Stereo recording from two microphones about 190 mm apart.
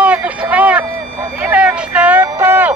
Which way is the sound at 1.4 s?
5° right (ahead or behind).